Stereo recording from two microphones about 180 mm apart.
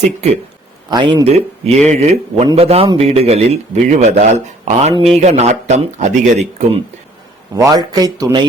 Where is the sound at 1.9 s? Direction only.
40° right (ahead or behind).